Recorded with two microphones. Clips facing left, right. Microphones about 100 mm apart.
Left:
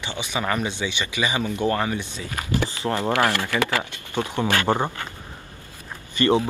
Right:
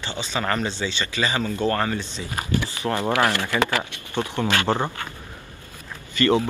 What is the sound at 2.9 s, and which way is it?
Speech, 20° right (ahead or behind).